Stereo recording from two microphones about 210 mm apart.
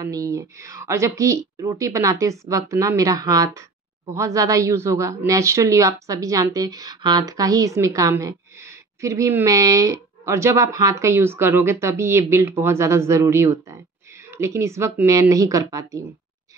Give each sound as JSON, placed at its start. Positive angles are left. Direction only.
{"t": 0.0, "sound": "a woman's voice", "side_deg": -15}